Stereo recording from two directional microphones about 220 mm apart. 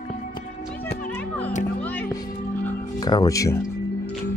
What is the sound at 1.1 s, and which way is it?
Music, 5° left (ahead or behind).